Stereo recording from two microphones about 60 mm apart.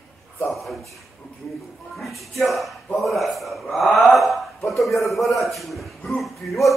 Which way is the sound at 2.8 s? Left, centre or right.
Centre.